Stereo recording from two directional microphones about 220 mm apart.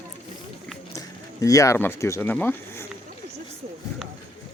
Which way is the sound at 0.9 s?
15° left (ahead or behind).